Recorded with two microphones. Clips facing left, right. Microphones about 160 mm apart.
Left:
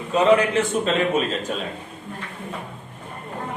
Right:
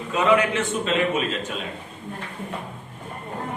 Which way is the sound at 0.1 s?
35° left (ahead or behind).